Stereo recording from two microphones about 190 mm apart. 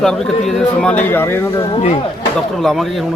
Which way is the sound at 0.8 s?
10° left (ahead or behind).